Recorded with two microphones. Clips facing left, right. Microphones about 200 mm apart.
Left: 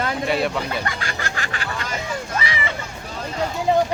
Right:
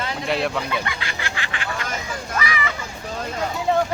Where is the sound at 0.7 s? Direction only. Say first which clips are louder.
Left 1 dB; 45° left (ahead or behind).